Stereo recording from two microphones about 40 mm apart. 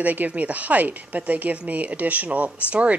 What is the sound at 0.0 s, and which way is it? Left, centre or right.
Speech, right.